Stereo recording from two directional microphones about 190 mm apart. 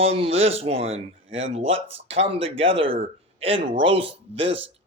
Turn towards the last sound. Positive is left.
turn(degrees=-30)  # may be behind; listen again after turning